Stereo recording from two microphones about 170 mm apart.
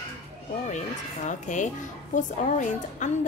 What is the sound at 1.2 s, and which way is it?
A woman's voice, 45° left (ahead or behind).